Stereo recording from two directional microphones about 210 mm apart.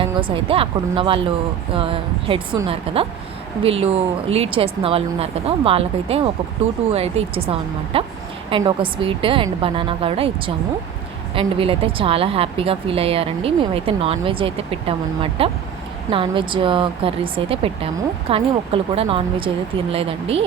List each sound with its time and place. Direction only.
0.0 s a woman's voice: 25° right (ahead or behind)
7.3 s a woman's voice: 25° right (ahead or behind)